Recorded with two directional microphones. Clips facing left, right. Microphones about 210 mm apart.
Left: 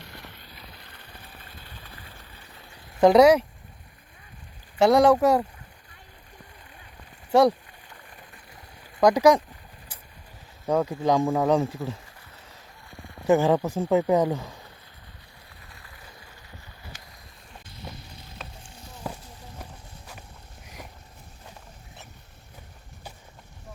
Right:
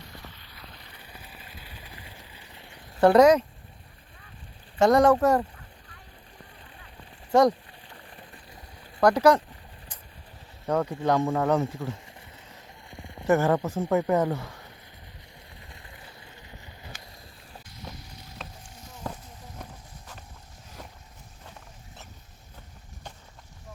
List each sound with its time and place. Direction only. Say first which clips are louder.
0.0 s vehicle: left 1 dB; 70° left (ahead or behind)
0.8 s vehicle: even; centre (ahead or behind)
3.0 s speech: left 1 dB; 10° left (ahead or behind)
4.8 s speech: left 1 dB; 10° left (ahead or behind)
7.3 s speech: left 1 dB; 10° left (ahead or behind)
7.9 s a sound: right 2 dB; 35° right (ahead or behind)
9.0 s speech: left 2 dB; 15° left (ahead or behind)
10.7 s speech: left 2 dB; 10° left (ahead or behind)
13.2 s speech: left 2 dB; 15° left (ahead or behind)
15.7 s boat: even; 25° right (ahead or behind)
18.6 s a sound: left 1 dB; 30° left (ahead or behind)
20.8 s a sound: left 1 dB; 10° left (ahead or behind)